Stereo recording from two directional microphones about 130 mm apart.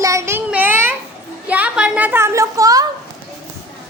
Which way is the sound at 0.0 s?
20° right (ahead or behind).